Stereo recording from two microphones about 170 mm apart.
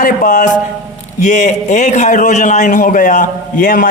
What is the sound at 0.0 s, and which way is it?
A man's voice, 50° left (ahead or behind).